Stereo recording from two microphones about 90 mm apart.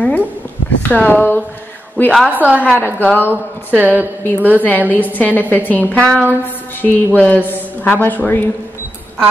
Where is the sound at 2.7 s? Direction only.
20° right (ahead or behind).